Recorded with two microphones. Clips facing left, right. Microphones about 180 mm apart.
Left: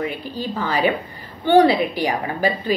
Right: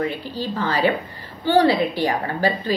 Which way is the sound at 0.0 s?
15° left (ahead or behind).